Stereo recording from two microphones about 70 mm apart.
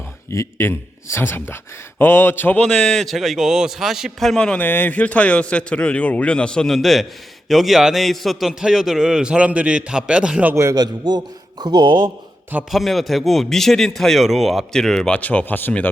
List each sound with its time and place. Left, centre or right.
0.3 s speech: left
2.6 s a man's voice: centre
4.4 s a man's voice: centre
4.6 s a man's voice: left
6.7 s a man's voice: centre
10.5 s a man's voice: right
10.8 s a man's voice: right
12.7 s a man's voice: centre
15.2 s speech: left